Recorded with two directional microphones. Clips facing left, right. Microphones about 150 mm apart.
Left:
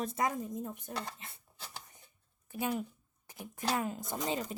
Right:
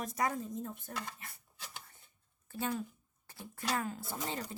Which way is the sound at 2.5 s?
15° left (ahead or behind).